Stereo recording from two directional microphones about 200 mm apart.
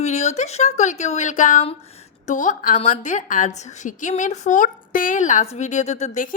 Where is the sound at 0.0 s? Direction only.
35° left (ahead or behind).